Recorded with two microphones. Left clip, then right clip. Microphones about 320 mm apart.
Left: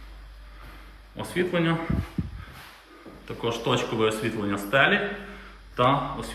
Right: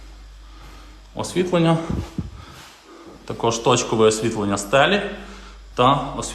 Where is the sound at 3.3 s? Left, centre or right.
Centre.